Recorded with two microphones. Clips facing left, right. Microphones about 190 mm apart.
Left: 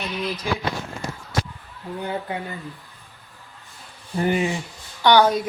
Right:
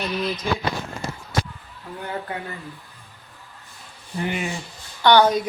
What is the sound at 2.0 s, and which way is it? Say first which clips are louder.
Speech: left 1 dB; 15° left (ahead or behind).